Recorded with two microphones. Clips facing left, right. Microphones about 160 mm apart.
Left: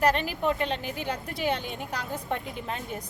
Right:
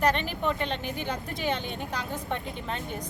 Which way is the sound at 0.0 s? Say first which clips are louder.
Left 1 dB; 5° left (ahead or behind).